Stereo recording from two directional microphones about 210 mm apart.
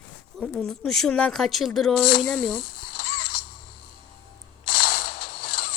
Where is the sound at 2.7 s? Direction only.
45° left (ahead or behind).